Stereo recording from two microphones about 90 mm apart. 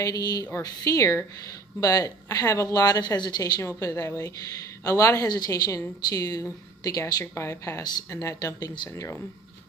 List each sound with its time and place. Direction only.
0.0 s speech: 45° left (ahead or behind)